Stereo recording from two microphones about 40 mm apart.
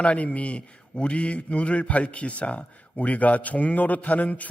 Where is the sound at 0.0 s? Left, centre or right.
Left.